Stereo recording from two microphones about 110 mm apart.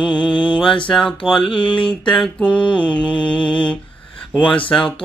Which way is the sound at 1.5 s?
50° left (ahead or behind).